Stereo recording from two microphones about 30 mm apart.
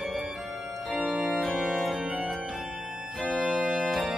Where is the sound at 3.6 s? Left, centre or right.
Right.